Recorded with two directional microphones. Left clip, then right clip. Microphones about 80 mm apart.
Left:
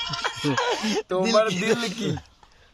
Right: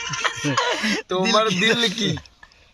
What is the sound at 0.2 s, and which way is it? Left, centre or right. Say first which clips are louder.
Snicker: right 4 dB; left.